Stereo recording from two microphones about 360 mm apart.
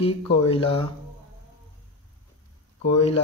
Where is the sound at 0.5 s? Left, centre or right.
Centre.